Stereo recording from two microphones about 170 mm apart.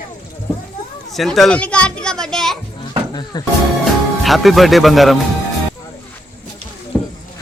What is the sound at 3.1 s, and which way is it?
Speech, 25° left (ahead or behind).